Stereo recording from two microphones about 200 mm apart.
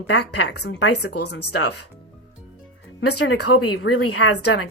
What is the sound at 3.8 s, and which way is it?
Speech, 60° left (ahead or behind).